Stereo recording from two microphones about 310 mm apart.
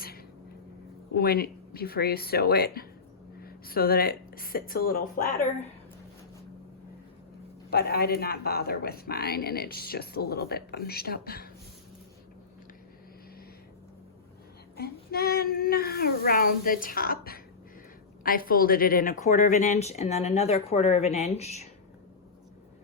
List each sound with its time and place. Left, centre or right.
1.1 s speech: left
7.7 s speech: left
14.8 s speech: left